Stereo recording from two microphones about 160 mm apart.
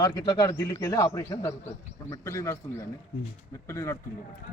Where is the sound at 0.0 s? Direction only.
25° left (ahead or behind).